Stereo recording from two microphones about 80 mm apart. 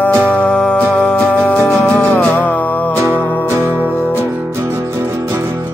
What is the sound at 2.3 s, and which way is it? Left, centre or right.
Music, centre.